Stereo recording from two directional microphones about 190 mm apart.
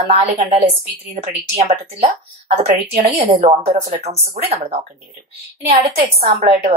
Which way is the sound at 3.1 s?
35° right (ahead or behind).